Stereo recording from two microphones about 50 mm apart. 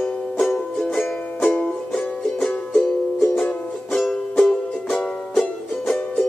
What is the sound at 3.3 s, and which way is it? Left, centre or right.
Music, centre.